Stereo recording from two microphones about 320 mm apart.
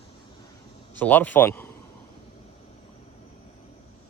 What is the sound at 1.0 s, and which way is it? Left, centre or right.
Speech, centre.